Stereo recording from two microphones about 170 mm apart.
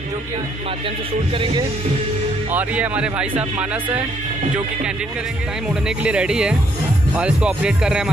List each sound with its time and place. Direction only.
0.8 s speech: 30° right (ahead or behind)
2.5 s speech: 10° right (ahead or behind)
5.9 s speech: 5° right (ahead or behind)